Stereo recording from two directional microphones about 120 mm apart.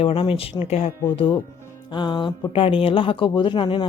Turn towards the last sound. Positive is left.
turn(degrees=45)  # may be behind; listen again after turning